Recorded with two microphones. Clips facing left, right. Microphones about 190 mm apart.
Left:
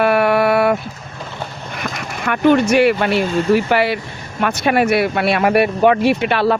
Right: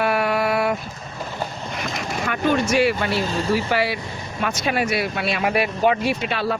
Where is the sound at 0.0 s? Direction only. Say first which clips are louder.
Left 6 dB; 65° left (ahead or behind).